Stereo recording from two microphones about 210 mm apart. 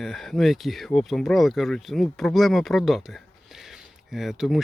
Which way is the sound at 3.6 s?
Centre (ahead or behind).